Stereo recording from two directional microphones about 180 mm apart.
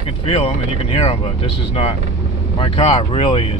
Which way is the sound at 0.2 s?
35° left (ahead or behind).